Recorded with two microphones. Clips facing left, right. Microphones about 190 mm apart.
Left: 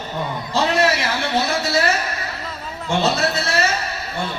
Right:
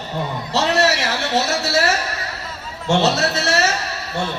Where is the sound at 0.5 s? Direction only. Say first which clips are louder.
Even; 75° right (ahead or behind).